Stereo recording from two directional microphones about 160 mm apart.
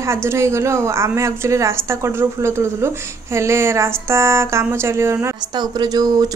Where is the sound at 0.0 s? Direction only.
15° right (ahead or behind).